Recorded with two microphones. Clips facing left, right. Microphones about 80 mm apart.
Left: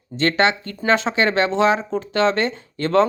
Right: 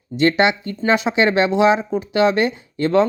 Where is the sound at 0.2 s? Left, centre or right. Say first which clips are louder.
Right 2 dB; centre.